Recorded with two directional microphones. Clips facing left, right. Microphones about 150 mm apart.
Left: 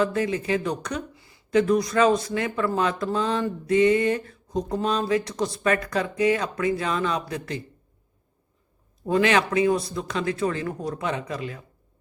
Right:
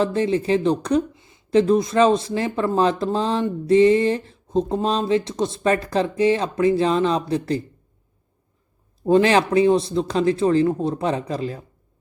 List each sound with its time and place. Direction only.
0.0 s speech: 30° right (ahead or behind)
9.0 s speech: 30° right (ahead or behind)